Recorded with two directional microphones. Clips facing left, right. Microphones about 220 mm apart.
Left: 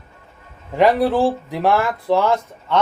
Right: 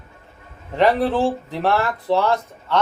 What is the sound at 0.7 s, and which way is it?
Speech, 10° left (ahead or behind).